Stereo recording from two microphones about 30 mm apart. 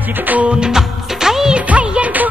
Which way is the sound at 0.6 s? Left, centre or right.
Centre.